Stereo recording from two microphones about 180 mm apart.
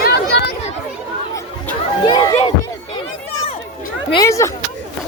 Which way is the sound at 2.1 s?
20° left (ahead or behind).